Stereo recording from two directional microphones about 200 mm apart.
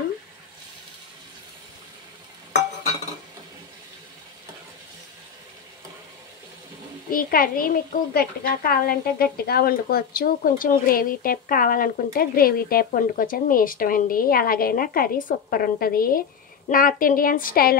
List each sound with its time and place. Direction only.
7.1 s a child's voice: 45° left (ahead or behind)